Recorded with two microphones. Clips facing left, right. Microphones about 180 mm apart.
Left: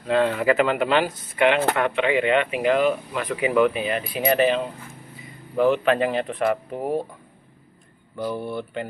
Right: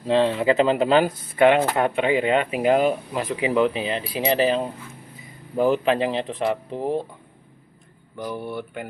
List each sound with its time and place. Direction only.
0.1 s speech: 25° right (ahead or behind); by 5.8 s 40° right (ahead or behind)
5.9 s speech: 30° right (ahead or behind)
8.2 s speech: 15° right (ahead or behind)